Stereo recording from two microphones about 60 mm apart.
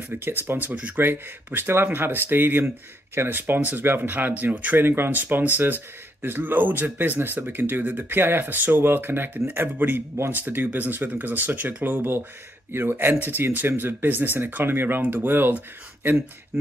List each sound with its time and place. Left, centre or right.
0.1 s speech: right
4.8 s speech: right
13.2 s speech: right